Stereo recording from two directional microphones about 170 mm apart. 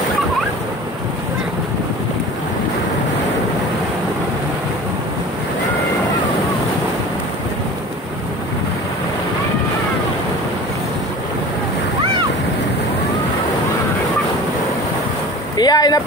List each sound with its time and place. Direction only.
15.5 s vehicle: 25° left (ahead or behind)